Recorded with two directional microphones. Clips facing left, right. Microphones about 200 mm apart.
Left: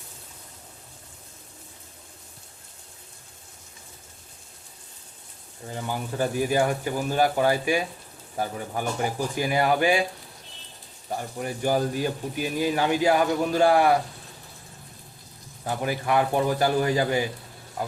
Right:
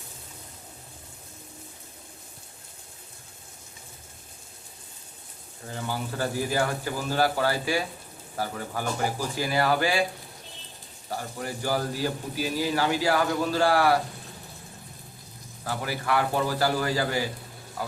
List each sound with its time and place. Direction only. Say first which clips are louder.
5.7 s speech: left 2 dB; 20° left (ahead or behind)
11.1 s speech: left 2 dB; 20° left (ahead or behind)
15.6 s speech: left 3 dB; 20° left (ahead or behind)